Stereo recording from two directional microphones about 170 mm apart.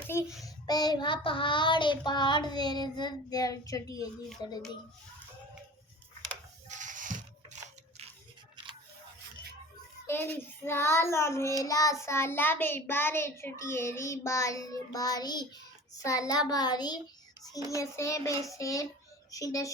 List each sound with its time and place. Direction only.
0.1 s a child's voice: 15° left (ahead or behind)
0.4 s child singing: 25° left (ahead or behind)
6.7 s a sound: 50° right (ahead or behind)
10.1 s a child's voice: 15° left (ahead or behind)
16.0 s child singing: 20° left (ahead or behind)